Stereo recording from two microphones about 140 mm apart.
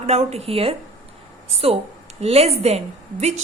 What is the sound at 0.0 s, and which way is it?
A woman's voice, 50° right (ahead or behind).